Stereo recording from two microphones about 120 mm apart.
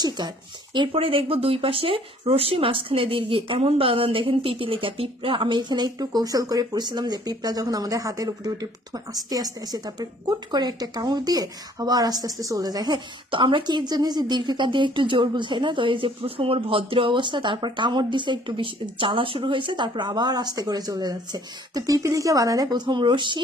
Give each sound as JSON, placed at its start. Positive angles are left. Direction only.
{"t": 0.9, "sound": "speech", "side_deg": -50}